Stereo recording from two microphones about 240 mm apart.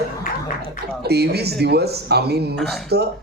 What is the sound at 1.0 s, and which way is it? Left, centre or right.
Speech, right.